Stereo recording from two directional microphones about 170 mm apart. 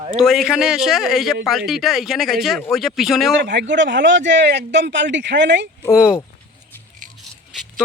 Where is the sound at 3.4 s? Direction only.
90° right.